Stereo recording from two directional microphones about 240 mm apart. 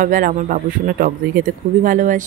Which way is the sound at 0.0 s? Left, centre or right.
Right.